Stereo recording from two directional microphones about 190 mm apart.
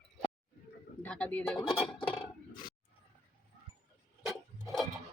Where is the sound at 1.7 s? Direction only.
25° left (ahead or behind).